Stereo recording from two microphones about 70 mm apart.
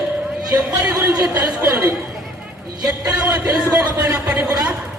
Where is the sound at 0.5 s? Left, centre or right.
Right.